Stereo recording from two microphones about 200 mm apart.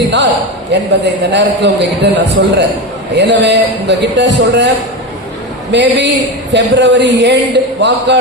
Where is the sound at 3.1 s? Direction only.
60° right (ahead or behind).